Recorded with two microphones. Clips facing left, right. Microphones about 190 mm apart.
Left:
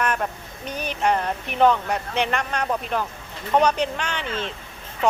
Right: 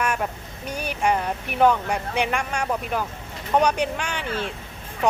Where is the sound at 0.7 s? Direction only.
10° right (ahead or behind).